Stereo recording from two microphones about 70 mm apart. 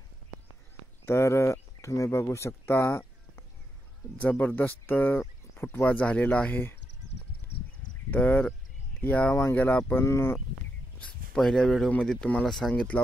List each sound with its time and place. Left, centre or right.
1.0 s speech: left
4.2 s speech: left
8.1 s speech: left
9.9 s speech: left
11.3 s speech: centre